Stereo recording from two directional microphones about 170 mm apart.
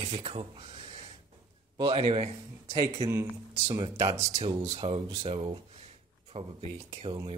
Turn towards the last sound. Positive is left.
turn(degrees=-30)  # may be behind; listen again after turning